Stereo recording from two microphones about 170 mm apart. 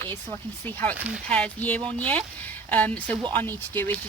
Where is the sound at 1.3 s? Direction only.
5° left (ahead or behind).